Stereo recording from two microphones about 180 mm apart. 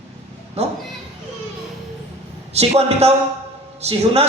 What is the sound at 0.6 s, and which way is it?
Speech, 35° right (ahead or behind).